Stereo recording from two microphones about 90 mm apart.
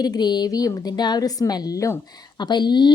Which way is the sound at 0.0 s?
50° left (ahead or behind).